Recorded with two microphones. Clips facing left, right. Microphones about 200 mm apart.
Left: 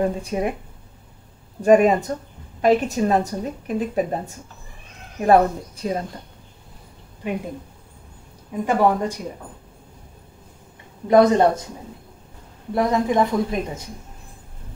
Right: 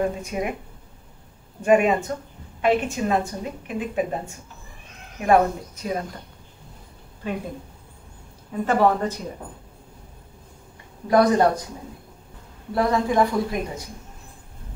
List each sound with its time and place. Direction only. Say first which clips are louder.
0.2 s a woman's voice: left 3 dB; 35° left (ahead or behind)
1.6 s a woman's voice: left 3 dB; 40° left (ahead or behind)
5.2 s a woman's voice: left 3 dB; 35° left (ahead or behind)
8.6 s speech: left 1 dB; 15° left (ahead or behind)
11.1 s speech: left 3 dB; 25° left (ahead or behind)
12.7 s speech: left 1 dB; 20° left (ahead or behind)